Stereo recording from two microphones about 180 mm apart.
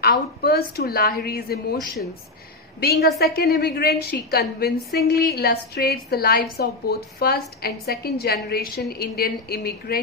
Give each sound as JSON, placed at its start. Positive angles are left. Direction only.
{"t": 0.0, "sound": "a woman's voice", "side_deg": 60}
{"t": 2.8, "sound": "a woman's voice", "side_deg": 60}